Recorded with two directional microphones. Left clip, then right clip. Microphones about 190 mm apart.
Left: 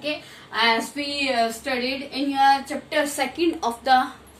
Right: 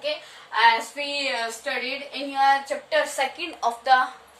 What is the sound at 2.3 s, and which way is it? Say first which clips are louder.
A woman's voice: left 1 dB; 15° right (ahead or behind).